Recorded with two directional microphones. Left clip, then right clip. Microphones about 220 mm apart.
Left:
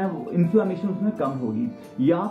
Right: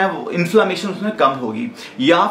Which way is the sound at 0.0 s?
10° right (ahead or behind).